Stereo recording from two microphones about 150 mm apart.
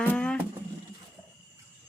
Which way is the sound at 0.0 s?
10° left (ahead or behind).